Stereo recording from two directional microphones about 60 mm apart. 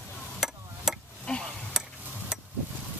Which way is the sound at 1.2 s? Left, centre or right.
Centre.